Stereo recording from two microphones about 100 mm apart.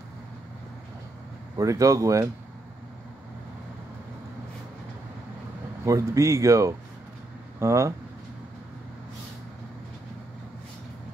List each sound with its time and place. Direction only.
1.6 s speech: 35° right (ahead or behind)
5.9 s speech: 30° right (ahead or behind)